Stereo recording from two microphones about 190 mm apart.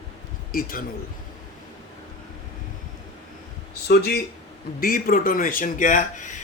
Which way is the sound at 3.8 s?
60° left (ahead or behind).